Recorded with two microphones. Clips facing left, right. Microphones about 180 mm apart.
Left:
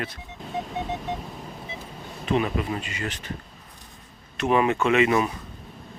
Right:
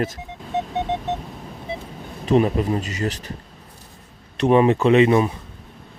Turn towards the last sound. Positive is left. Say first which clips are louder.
# right 5 dB
turn(degrees=-30)  # may be behind; listen again after turning